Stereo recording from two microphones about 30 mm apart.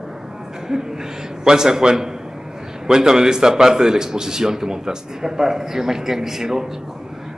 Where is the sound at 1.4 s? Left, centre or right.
Right.